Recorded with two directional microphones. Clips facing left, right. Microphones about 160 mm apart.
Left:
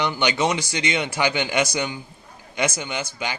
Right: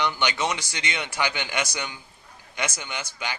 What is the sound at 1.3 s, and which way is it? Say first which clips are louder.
Speech: left 7 dB; 15° left (ahead or behind).